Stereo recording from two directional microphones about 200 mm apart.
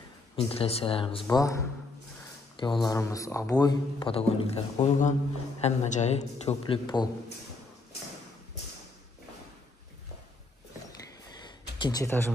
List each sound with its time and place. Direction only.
0.4 s speech: 30° left (ahead or behind)
1.3 s a man's voice: 15° left (ahead or behind)
11.8 s speech: 15° left (ahead or behind)